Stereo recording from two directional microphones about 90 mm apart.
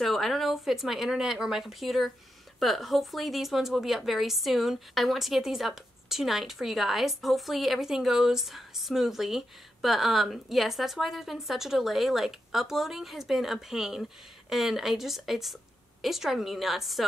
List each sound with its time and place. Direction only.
0.0 s a woman's voice: centre (ahead or behind)